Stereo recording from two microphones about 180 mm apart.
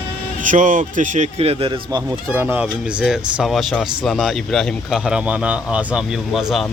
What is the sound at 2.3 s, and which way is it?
Speech, 10° right (ahead or behind).